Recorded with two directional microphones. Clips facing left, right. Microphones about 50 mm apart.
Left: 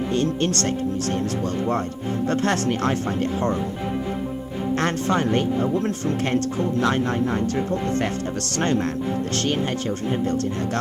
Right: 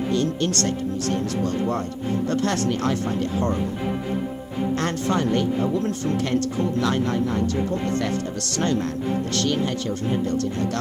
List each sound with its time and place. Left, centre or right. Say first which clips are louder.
0.1 s speech: left 1 dB; left
2.5 s speech: left 1 dB; left
4.8 s speech: left 3 dB; left
6.8 s speech: left 2 dB; left
9.3 s speech: right 1 dB; left